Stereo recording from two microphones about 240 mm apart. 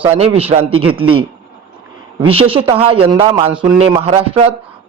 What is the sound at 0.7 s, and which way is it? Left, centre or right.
Speech, right.